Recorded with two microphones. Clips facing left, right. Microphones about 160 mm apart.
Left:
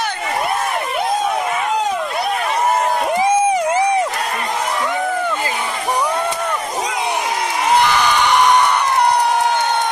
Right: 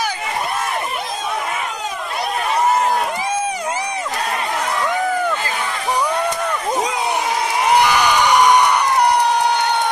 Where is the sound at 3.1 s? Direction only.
20° left (ahead or behind).